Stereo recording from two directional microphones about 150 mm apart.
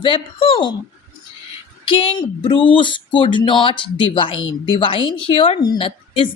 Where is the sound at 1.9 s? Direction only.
35° left (ahead or behind).